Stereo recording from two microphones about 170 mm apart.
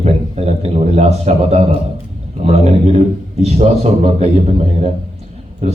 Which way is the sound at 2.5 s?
40° right (ahead or behind).